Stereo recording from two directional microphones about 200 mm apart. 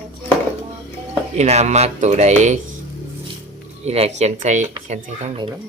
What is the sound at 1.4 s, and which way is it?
Speech, 35° right (ahead or behind).